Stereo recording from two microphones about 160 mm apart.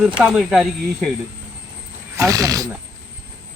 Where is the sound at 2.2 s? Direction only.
20° right (ahead or behind).